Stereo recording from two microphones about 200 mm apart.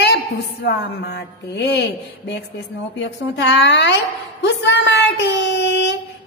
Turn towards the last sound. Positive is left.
turn(degrees=60)  # may be behind; listen again after turning